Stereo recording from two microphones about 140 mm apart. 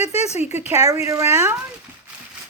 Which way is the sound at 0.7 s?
25° right (ahead or behind).